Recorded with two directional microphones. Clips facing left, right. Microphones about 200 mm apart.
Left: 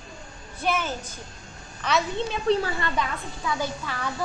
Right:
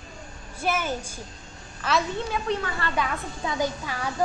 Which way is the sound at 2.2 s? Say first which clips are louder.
Left 4 dB; 30° left (ahead or behind).